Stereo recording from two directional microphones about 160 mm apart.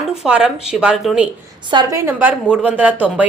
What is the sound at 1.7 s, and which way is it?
Speech, 30° right (ahead or behind).